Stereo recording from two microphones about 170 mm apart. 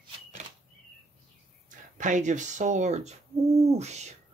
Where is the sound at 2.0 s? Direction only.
45° right (ahead or behind).